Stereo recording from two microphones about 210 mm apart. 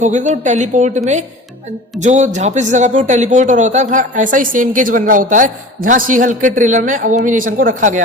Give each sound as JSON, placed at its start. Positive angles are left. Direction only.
{"t": 0.0, "sound": "a man's voice", "side_deg": -35}